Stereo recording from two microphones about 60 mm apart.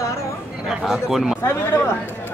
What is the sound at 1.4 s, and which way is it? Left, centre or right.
Speech, left.